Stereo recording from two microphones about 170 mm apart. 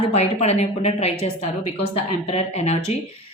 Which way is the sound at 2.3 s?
40° left (ahead or behind).